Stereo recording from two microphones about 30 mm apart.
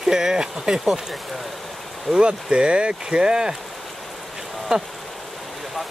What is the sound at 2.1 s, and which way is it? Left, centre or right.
Speech, right.